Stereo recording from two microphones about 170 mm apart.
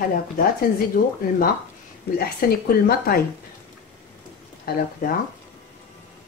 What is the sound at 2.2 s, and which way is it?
Speech, 60° left (ahead or behind).